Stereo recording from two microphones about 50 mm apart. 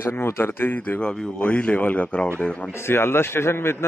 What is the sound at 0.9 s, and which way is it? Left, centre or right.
Speech, centre.